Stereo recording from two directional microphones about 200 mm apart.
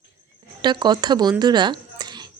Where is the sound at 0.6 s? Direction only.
20° right (ahead or behind).